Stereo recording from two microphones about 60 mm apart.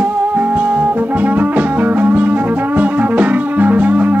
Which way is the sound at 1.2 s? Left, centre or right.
Right.